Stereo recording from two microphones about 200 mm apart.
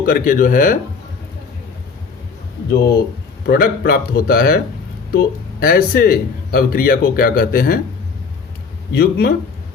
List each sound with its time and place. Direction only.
0.0 s speech: 45° left (ahead or behind)
2.6 s speech: 55° left (ahead or behind)
9.0 s speech: 50° left (ahead or behind)